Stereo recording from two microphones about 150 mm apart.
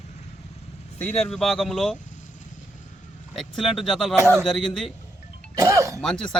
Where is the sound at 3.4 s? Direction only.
Centre (ahead or behind).